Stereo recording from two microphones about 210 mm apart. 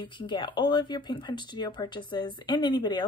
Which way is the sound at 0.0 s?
20° left (ahead or behind).